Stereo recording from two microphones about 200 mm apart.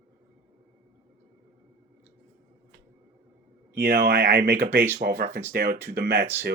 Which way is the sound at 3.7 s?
50° right (ahead or behind).